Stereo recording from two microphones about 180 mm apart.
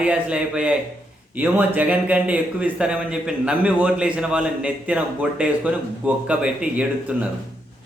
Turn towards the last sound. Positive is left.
turn(degrees=-5)  # may be behind; listen again after turning